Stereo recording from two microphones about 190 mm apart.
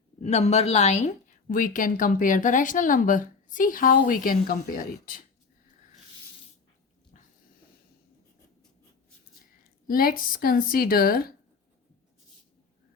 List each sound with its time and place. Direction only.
0.2 s a woman's voice: 35° left (ahead or behind)
9.8 s a woman's voice: 50° left (ahead or behind)